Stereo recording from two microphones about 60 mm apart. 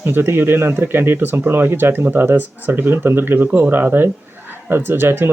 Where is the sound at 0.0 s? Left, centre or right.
Right.